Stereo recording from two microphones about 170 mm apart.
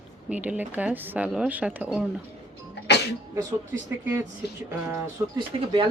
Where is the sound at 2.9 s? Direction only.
80° left.